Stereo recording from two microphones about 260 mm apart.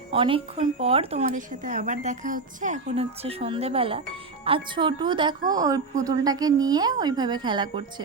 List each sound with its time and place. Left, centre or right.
0.1 s a woman's voice: centre